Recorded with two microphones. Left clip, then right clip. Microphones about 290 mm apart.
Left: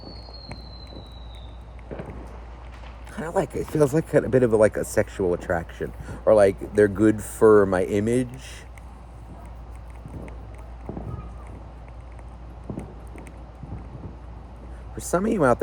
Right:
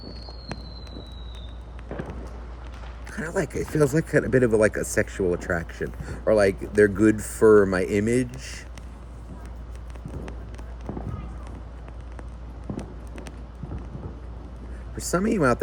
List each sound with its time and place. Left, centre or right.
3.1 s speech: centre
10.9 s run: centre
12.7 s a sound: centre
15.0 s speech: centre